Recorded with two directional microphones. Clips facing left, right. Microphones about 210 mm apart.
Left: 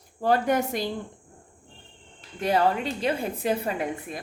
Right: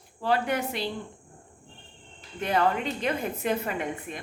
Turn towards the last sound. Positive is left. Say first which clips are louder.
# left 2 dB
turn(degrees=35)  # may be behind; listen again after turning